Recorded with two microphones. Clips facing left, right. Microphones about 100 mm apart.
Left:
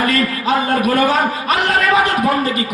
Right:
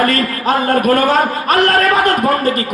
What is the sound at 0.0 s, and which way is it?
A man's voice, 45° right (ahead or behind).